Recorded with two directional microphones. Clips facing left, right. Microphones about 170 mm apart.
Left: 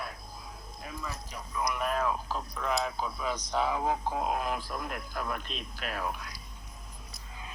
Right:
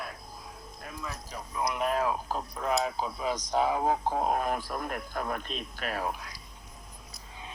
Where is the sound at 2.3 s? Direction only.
40° right (ahead or behind).